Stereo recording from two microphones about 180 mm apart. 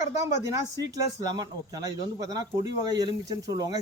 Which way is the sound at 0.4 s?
20° right (ahead or behind).